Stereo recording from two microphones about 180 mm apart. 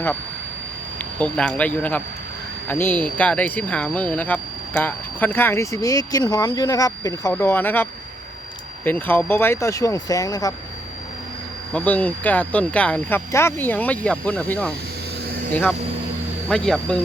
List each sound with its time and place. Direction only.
1.2 s speech: 5° left (ahead or behind)
11.7 s speech: 10° left (ahead or behind)
16.5 s speech: 5° left (ahead or behind)